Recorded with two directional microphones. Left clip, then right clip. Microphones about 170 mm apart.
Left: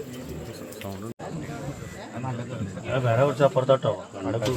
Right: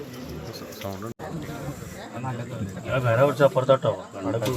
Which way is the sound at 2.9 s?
15° right (ahead or behind).